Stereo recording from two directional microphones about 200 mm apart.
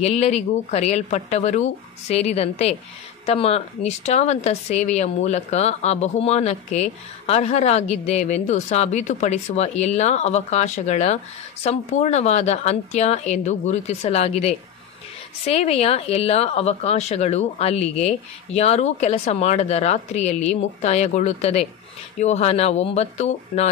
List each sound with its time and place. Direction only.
0.0 s a woman's voice: 30° left (ahead or behind)